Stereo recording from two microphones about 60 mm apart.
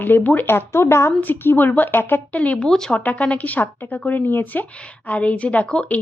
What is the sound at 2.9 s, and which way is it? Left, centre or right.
A woman's voice, left.